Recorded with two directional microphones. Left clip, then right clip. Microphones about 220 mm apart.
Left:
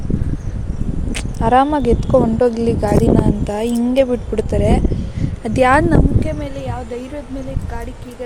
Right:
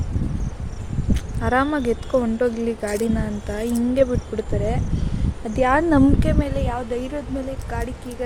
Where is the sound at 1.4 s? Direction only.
15° left (ahead or behind).